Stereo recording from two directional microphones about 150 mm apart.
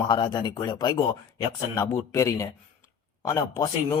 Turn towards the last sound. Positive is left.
turn(degrees=20)  # may be behind; listen again after turning